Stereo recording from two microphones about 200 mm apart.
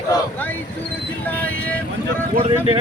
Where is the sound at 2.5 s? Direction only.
25° right (ahead or behind).